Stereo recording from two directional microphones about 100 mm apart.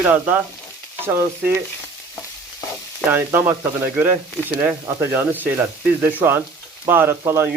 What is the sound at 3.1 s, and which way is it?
Speech, 25° right (ahead or behind).